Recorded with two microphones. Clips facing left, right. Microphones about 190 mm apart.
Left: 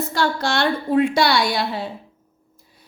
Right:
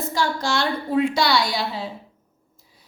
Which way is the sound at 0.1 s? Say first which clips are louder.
Left 1 dB; 65° left (ahead or behind).